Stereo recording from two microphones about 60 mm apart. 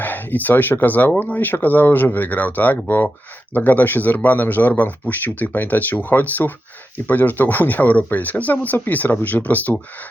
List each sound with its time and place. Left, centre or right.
0.0 s speech: left